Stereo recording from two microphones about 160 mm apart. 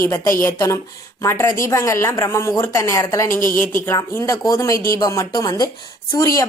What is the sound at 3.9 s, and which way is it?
A woman's voice, 20° left (ahead or behind).